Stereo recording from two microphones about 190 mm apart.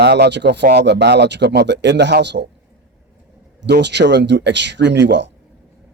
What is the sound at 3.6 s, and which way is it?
A man's voice, 65° right (ahead or behind).